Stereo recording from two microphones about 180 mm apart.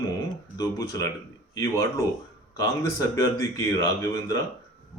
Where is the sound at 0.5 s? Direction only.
20° left (ahead or behind).